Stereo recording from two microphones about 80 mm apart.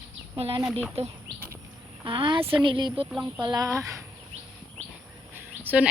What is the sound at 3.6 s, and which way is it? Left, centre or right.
Speech, right.